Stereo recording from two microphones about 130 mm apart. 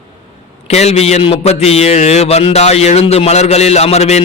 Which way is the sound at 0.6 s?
55° left (ahead or behind).